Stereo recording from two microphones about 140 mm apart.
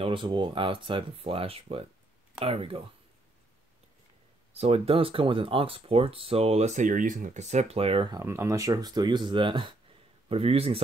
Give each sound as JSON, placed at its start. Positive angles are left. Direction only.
{"t": 0.0, "sound": "speech", "side_deg": -35}
{"t": 4.6, "sound": "speech", "side_deg": -45}
{"t": 8.2, "sound": "speech", "side_deg": -20}